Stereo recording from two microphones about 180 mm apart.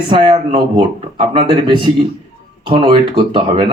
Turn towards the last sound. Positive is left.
turn(degrees=-30)  # may be behind; listen again after turning